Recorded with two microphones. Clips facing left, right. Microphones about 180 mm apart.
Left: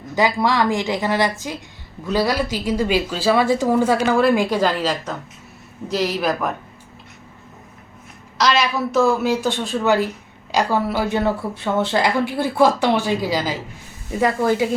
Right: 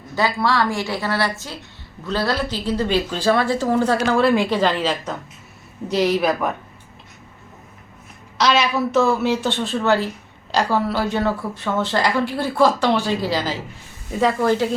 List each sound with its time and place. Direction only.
0.2 s speech: 15° left (ahead or behind)
5.9 s speech: centre (ahead or behind)
8.4 s a woman's voice: 5° right (ahead or behind)
8.9 s speech: 10° left (ahead or behind)